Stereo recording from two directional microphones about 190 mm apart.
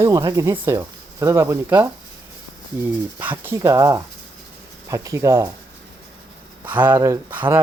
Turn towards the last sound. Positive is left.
turn(degrees=-10)  # may be behind; listen again after turning